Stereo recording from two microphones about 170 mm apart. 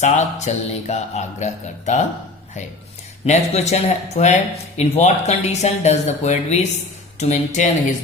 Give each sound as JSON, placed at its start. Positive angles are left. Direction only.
{"t": 0.0, "sound": "speech", "side_deg": 45}
{"t": 3.2, "sound": "speech", "side_deg": 40}